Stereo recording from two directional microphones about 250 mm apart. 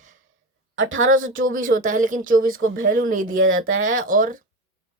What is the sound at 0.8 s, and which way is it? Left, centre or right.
Speech, right.